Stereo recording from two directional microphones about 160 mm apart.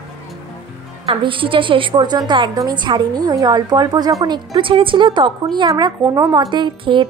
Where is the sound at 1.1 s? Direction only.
35° right (ahead or behind).